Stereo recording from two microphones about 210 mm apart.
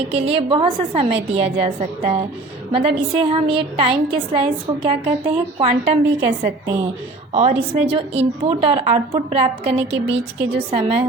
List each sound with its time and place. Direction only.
0.1 s a woman's voice: 30° right (ahead or behind)